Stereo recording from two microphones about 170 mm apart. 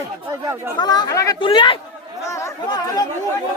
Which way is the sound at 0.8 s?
25° left (ahead or behind).